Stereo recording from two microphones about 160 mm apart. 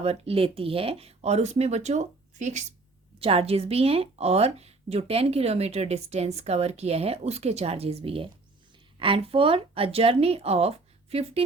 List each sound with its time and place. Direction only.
0.0 s speech: 40° right (ahead or behind)